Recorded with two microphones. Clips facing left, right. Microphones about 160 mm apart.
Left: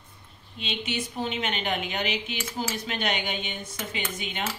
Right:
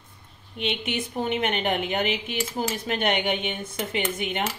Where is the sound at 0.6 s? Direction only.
60° right (ahead or behind).